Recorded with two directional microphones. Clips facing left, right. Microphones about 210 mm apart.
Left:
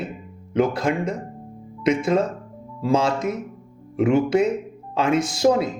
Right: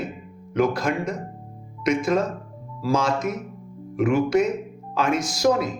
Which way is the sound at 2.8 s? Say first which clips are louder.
Left 2 dB; 30° left (ahead or behind).